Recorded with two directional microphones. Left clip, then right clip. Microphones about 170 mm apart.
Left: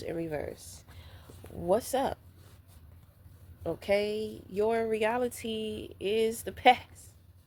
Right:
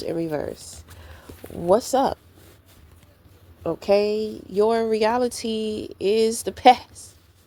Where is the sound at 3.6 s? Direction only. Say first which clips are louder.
Right 9 dB; 40° right (ahead or behind).